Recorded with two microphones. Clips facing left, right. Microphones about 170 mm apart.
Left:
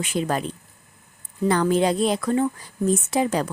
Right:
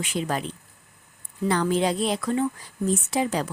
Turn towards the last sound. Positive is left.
turn(degrees=50)  # may be behind; listen again after turning